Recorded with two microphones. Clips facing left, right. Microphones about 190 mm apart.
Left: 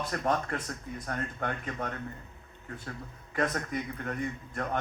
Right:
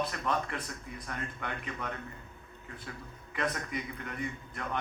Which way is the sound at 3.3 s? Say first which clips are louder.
Left 4 dB; 45° left (ahead or behind).